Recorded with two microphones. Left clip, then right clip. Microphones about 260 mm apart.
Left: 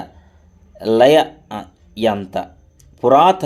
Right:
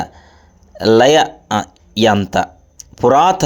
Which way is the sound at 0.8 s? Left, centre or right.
Right.